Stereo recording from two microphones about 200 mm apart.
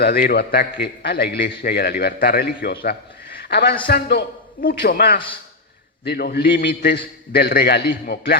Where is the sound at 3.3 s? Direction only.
50° left (ahead or behind).